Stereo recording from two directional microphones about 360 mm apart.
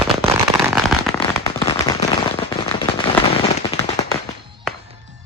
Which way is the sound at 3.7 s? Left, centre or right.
Centre.